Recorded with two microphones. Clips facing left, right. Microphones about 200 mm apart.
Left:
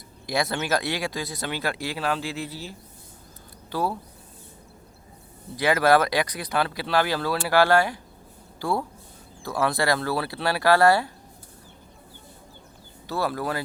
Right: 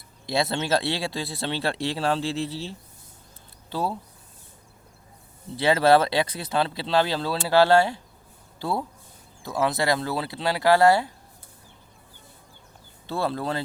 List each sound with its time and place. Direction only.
0.3 s speech: 25° right (ahead or behind)
5.5 s speech: 25° right (ahead or behind)
13.1 s speech: 25° right (ahead or behind)